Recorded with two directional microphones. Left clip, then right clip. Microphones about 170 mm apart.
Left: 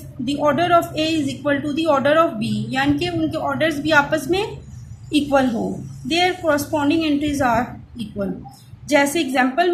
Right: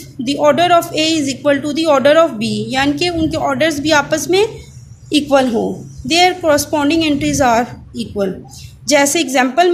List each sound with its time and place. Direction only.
0.3 s a woman's voice: 55° right (ahead or behind)